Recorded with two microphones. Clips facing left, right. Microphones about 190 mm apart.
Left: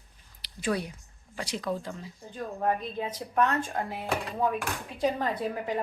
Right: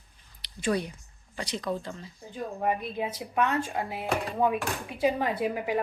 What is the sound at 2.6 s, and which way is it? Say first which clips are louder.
A woman's voice: even; 10° right (ahead or behind).